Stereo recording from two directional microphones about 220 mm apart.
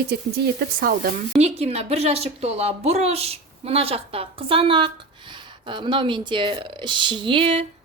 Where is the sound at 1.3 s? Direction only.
30° right (ahead or behind).